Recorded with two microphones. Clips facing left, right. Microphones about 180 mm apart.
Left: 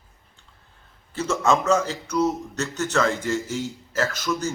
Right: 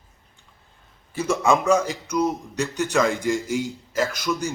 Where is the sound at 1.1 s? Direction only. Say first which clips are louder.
Right 1 dB; 10° right (ahead or behind).